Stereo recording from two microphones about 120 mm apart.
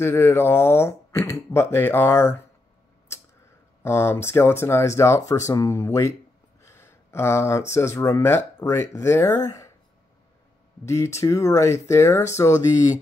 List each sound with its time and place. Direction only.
0.0 s speech: 20° left (ahead or behind)
3.8 s speech: 20° left (ahead or behind)
6.6 s a sound: 20° left (ahead or behind)
7.7 s speech: 20° left (ahead or behind)
10.9 s speech: 25° left (ahead or behind)